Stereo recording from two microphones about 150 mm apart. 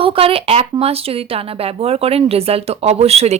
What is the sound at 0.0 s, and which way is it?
A woman's voice, 40° right (ahead or behind).